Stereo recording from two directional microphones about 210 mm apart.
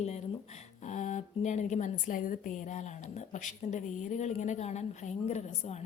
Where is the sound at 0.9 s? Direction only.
35° left (ahead or behind).